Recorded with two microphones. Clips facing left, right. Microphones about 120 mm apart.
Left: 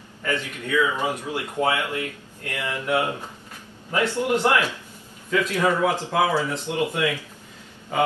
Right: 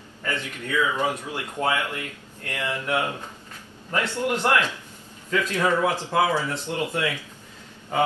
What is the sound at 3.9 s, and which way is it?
Speech, 15° left (ahead or behind).